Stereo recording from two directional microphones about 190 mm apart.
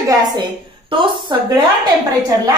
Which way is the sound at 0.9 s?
25° right (ahead or behind).